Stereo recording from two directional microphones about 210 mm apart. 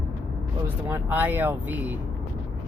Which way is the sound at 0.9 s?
10° right (ahead or behind).